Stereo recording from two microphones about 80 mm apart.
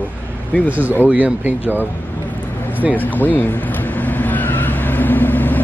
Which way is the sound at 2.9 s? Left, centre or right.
Left.